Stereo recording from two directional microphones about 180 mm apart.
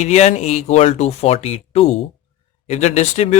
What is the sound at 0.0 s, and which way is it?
Speech, 40° left (ahead or behind).